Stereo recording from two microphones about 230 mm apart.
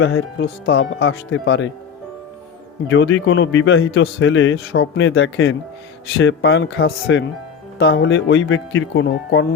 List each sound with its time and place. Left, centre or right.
0.0 s speech: left
2.9 s a man's voice: left